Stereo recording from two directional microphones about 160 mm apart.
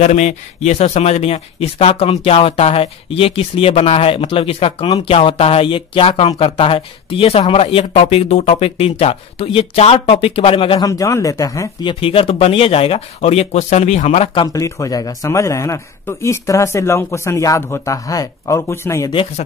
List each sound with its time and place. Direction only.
0.0 s speech: 45° left (ahead or behind)
10.8 s a man's voice: 20° left (ahead or behind)
11.9 s speech: 35° left (ahead or behind)
14.4 s a man's voice: 20° left (ahead or behind)